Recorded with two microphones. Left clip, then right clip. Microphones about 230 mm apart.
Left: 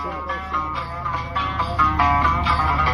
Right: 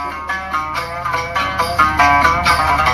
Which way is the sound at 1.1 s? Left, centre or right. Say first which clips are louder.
Right 6 dB; right.